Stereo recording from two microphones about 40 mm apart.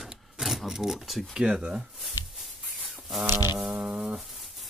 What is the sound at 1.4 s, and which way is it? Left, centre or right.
Speech, right.